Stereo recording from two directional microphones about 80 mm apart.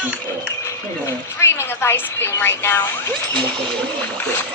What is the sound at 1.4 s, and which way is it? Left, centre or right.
A woman's voice, left.